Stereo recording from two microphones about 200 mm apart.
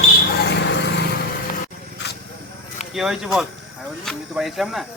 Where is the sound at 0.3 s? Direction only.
60° left (ahead or behind).